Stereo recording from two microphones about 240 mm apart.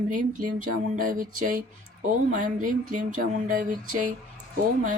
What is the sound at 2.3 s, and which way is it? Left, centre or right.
Speech, right.